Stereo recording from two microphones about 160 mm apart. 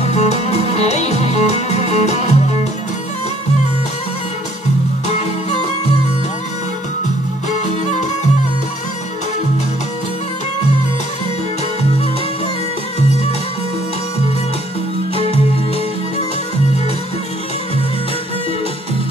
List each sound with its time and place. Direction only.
0.0 s music: 45° left (ahead or behind)
7.6 s music: 45° left (ahead or behind)